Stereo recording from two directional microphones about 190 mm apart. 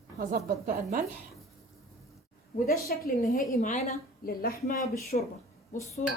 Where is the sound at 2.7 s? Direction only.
55° left (ahead or behind).